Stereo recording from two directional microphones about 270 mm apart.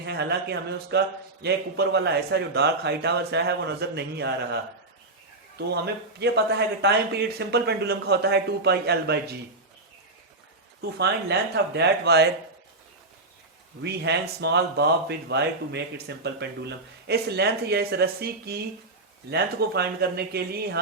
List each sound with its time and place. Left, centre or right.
0.0 s speech: right
5.5 s speech: right
10.8 s speech: right
13.8 s speech: right